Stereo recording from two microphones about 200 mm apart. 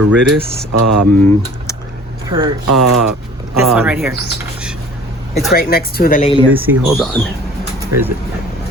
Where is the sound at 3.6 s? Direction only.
5° right (ahead or behind).